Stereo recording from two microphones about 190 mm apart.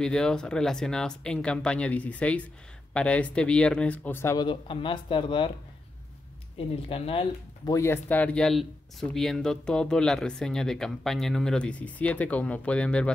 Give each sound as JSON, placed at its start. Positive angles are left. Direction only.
{"t": 0.0, "sound": "speech", "side_deg": 5}
{"t": 6.6, "sound": "speech", "side_deg": 30}
{"t": 7.7, "sound": "speech", "side_deg": 10}